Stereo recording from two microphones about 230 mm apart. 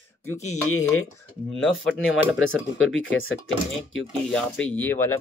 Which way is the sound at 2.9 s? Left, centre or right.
Left.